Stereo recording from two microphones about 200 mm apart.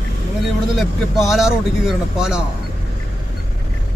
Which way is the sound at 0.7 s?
Centre (ahead or behind).